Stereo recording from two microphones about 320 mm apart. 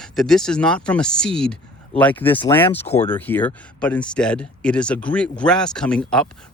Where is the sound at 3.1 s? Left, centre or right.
Centre.